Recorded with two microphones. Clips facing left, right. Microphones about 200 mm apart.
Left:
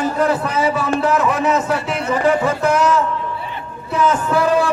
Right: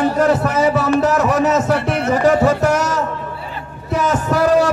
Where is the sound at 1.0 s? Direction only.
45° right (ahead or behind).